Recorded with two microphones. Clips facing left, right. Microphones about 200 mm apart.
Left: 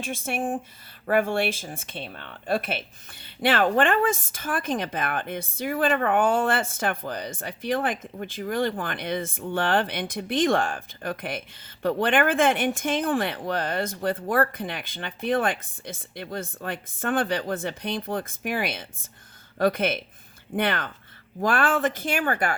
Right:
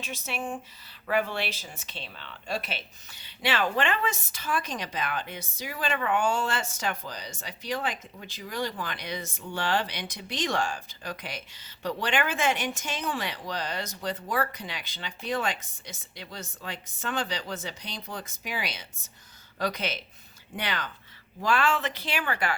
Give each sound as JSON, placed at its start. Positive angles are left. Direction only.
{"t": 0.0, "sound": "speech", "side_deg": 50}